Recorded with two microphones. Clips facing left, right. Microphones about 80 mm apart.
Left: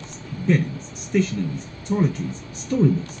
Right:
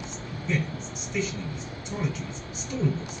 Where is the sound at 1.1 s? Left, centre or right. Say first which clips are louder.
Left 9 dB; left.